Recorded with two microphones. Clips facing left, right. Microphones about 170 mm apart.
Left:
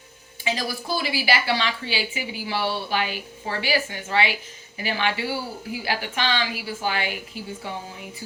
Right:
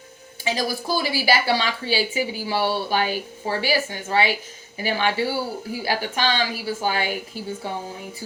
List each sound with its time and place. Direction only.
0.5 s a woman's voice: 40° right (ahead or behind)